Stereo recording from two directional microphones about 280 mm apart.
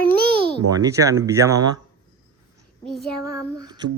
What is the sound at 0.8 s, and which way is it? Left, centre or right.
Speech, centre.